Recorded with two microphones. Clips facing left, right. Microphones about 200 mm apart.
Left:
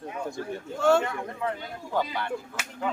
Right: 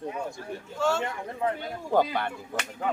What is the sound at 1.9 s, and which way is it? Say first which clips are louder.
Speech: right 5 dB; 55° right (ahead or behind).